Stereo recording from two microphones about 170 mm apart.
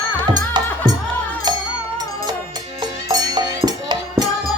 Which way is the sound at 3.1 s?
25° right (ahead or behind).